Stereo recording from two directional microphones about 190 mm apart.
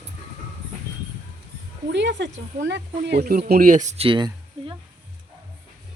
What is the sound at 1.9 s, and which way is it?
Speech, 70° right (ahead or behind).